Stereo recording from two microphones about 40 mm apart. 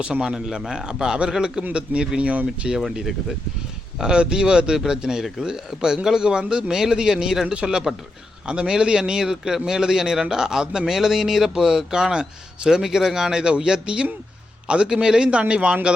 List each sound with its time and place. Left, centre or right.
0.0 s a man's voice: right
1.7 s a man's voice: right
2.7 s a man's voice: centre
15.3 s a man's voice: right